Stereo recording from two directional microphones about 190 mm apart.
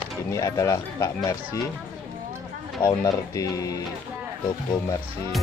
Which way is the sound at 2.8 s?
20° left (ahead or behind).